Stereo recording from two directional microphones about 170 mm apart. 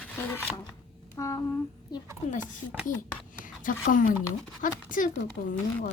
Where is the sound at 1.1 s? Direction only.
20° left (ahead or behind).